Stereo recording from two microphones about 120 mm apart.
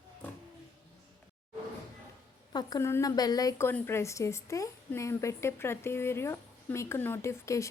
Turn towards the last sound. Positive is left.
turn(degrees=25)  # may be behind; listen again after turning